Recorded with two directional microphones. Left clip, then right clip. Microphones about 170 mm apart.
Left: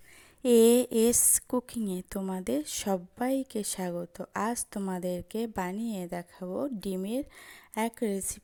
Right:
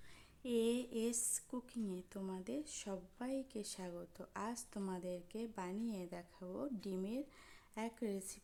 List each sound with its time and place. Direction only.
0.4 s a woman's voice: 50° left (ahead or behind)